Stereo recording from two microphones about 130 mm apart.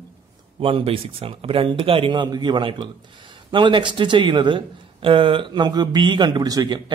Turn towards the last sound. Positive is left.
turn(degrees=-30)  # may be behind; listen again after turning